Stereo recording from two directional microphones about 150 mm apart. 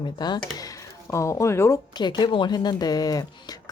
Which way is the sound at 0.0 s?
30° left (ahead or behind).